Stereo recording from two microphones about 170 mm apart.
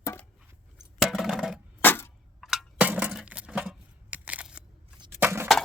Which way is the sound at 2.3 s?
Centre (ahead or behind).